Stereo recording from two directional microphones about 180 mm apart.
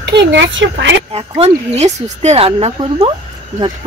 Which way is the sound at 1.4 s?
40° right (ahead or behind).